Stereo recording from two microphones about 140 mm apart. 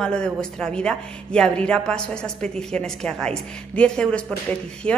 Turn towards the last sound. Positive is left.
turn(degrees=5)  # may be behind; listen again after turning